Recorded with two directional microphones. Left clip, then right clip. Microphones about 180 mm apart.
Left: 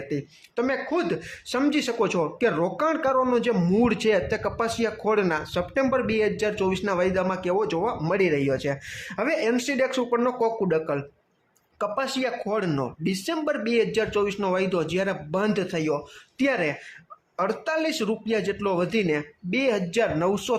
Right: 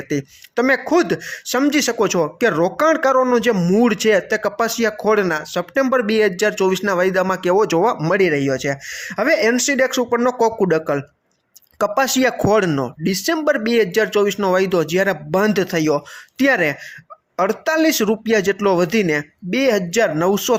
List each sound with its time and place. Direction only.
0.1 s speech: 30° right (ahead or behind)